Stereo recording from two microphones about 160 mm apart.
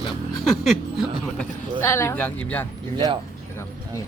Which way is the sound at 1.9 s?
15° left (ahead or behind).